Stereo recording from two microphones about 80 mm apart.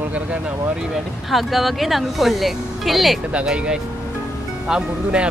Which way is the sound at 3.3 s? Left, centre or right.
Centre.